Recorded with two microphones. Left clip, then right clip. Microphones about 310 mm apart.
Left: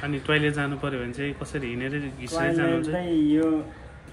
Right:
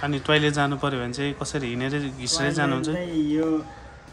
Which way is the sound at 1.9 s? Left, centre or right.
Centre.